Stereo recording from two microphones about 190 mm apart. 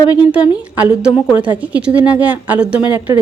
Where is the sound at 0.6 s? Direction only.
5° right (ahead or behind).